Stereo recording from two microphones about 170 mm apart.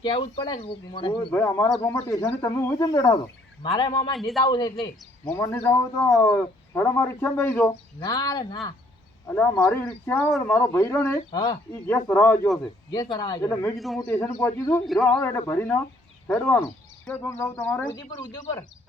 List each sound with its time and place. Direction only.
0.0 s speech: 30° left (ahead or behind)
1.3 s speech: 15° left (ahead or behind)
7.9 s speech: 25° left (ahead or behind)
11.3 s speech: 25° left (ahead or behind)
11.7 s speech: 15° left (ahead or behind)
12.9 s speech: 25° left (ahead or behind)
13.7 s a man's voice: centre (ahead or behind)
14.0 s speech: 15° left (ahead or behind)
14.8 s a man's voice: 5° left (ahead or behind)
15.3 s speech: 15° left (ahead or behind)